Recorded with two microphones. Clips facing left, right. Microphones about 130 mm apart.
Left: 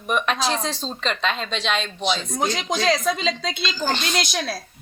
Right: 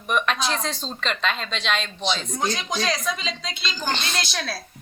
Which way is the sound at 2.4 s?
25° left (ahead or behind).